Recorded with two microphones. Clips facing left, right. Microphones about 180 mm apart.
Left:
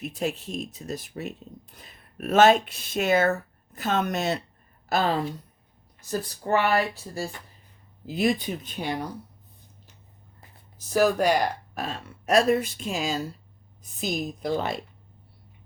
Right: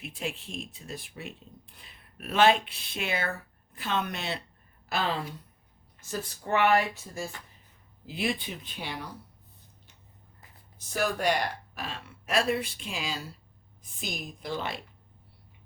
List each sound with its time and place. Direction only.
0.0 s speech: 40° left (ahead or behind)
10.8 s speech: 40° left (ahead or behind)